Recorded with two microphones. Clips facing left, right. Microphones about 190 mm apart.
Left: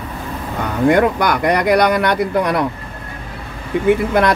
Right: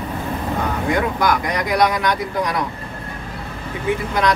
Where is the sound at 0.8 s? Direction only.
65° left (ahead or behind).